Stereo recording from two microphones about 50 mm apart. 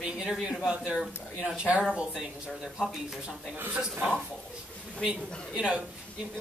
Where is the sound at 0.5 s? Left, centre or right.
Centre.